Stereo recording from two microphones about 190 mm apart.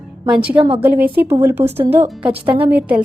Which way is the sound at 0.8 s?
10° right (ahead or behind).